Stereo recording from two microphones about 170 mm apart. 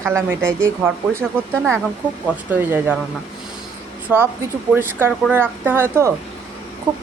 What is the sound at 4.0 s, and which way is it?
Speech, 15° right (ahead or behind).